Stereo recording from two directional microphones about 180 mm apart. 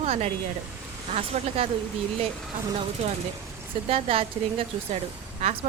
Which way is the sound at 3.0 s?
35° right (ahead or behind).